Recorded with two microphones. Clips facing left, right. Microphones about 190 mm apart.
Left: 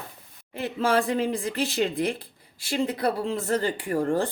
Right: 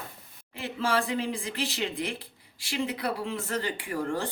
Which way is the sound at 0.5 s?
50° left (ahead or behind).